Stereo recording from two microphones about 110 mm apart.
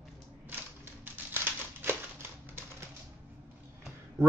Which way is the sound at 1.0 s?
20° right (ahead or behind).